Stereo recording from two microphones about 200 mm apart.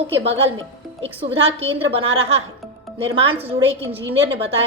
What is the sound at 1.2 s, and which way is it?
A woman's voice, 30° right (ahead or behind).